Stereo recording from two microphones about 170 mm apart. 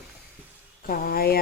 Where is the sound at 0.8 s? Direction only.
60° left (ahead or behind).